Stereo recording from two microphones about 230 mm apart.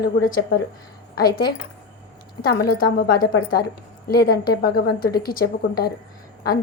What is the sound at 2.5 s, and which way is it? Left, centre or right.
A woman's voice, left.